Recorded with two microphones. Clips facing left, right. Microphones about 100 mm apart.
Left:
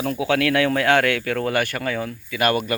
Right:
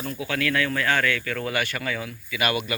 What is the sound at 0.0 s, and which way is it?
Speech, 85° left.